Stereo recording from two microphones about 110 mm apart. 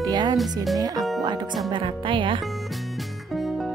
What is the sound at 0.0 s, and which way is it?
Speech, 40° right (ahead or behind).